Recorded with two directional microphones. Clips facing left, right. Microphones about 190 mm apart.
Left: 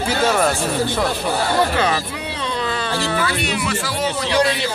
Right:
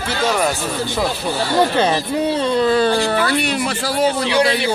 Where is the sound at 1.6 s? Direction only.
25° right (ahead or behind).